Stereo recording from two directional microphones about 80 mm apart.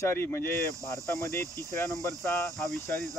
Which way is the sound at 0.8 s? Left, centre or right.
Right.